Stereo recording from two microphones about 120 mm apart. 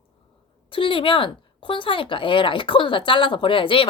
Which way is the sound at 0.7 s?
45° left (ahead or behind).